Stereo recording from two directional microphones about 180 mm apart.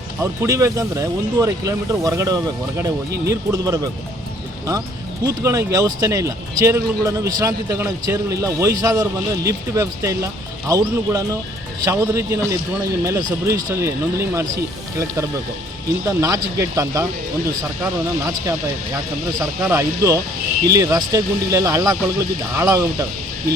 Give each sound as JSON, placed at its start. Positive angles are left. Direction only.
{"t": 0.2, "sound": "a man's voice", "side_deg": -15}
{"t": 5.2, "sound": "a man's voice", "side_deg": -20}